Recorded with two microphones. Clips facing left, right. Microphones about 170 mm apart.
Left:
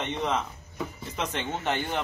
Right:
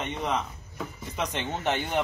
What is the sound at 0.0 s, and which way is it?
A man's voice, 5° right (ahead or behind).